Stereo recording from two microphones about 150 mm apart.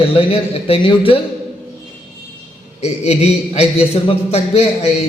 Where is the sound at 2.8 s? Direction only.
45° left (ahead or behind).